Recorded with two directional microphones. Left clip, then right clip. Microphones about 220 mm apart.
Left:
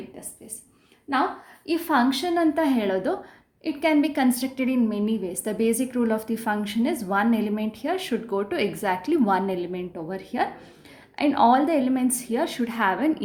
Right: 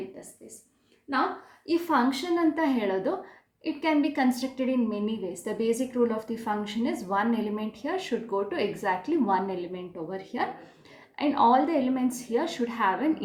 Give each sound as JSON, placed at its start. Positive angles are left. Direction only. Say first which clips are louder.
{"t": 1.6, "sound": "speech", "louder": "left 3 dB", "side_deg": 45}